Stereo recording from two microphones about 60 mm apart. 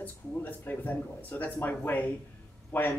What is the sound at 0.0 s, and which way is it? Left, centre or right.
Speech, left.